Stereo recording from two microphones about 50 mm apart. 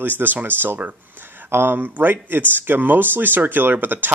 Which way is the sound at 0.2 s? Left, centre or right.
Right.